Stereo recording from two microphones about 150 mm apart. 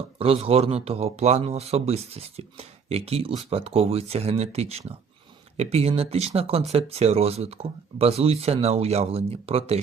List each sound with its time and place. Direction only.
0.2 s speech: 40° right (ahead or behind)